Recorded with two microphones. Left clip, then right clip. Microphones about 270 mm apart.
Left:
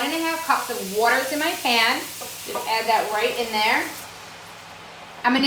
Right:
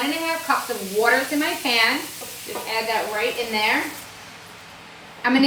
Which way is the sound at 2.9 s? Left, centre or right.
Centre.